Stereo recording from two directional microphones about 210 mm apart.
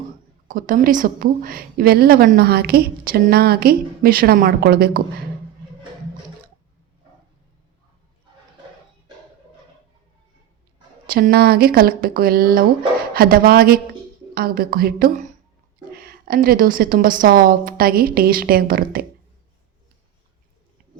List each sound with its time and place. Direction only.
0.4 s a woman's voice: 40° right (ahead or behind)
11.0 s a woman's voice: 45° right (ahead or behind)